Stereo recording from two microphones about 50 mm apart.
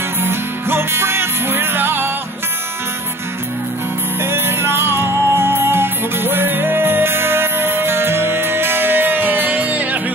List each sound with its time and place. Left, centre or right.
0.2 s music: right
4.2 s music: right